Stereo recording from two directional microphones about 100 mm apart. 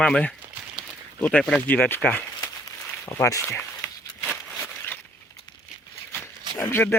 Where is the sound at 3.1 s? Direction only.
30° left (ahead or behind).